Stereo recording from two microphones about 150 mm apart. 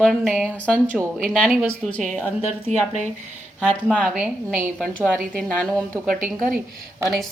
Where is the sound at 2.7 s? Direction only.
50° right (ahead or behind).